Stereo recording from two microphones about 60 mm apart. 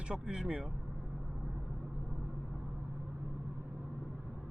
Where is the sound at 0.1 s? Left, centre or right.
Centre.